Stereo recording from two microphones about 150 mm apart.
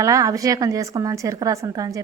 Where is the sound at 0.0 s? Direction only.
20° right (ahead or behind).